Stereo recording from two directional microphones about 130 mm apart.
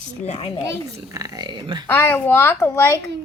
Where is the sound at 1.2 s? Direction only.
30° right (ahead or behind).